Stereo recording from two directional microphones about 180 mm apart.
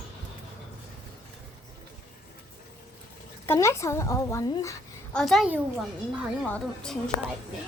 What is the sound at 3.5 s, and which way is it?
A woman's voice, 15° left (ahead or behind).